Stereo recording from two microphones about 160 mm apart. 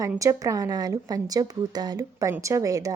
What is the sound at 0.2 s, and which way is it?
A woman's voice, 20° right (ahead or behind).